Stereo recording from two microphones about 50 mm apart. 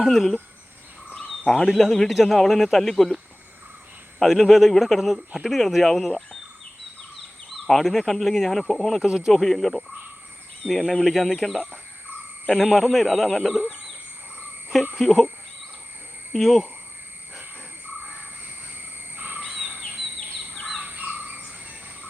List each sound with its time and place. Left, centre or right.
0.0 s a man's voice: centre
1.3 s a sound: centre
1.7 s a man's voice: centre
4.2 s a man's voice: centre
7.5 s a man's voice: centre
9.0 s speech: centre
9.3 s a man's voice: centre
14.9 s speech: centre
16.3 s a man's voice: centre
19.1 s owl: right
19.6 s bird: right